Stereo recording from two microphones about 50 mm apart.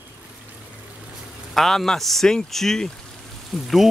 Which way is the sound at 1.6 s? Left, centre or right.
Centre.